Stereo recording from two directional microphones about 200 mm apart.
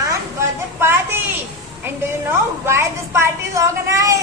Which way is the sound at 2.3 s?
10° right (ahead or behind).